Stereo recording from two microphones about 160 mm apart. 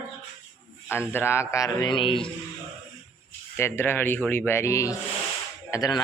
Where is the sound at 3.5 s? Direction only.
15° left (ahead or behind).